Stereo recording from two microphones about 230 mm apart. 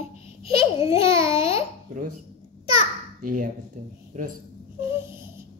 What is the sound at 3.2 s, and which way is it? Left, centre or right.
Speech, right.